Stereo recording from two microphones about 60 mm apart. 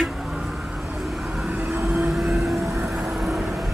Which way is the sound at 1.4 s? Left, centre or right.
Right.